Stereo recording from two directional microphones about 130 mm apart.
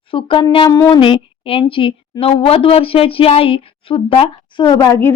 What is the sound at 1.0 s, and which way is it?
A woman's voice, 40° left (ahead or behind).